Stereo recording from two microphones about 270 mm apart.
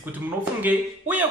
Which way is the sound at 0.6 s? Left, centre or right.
Centre.